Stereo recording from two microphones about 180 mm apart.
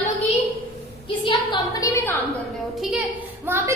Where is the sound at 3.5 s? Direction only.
10° right (ahead or behind).